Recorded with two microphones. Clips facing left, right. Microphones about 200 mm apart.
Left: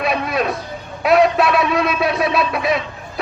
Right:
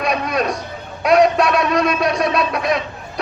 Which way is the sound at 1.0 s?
Centre (ahead or behind).